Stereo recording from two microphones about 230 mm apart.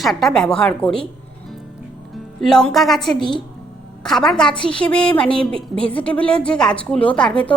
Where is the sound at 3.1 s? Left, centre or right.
Centre.